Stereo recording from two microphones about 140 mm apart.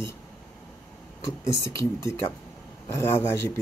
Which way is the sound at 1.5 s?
20° left (ahead or behind).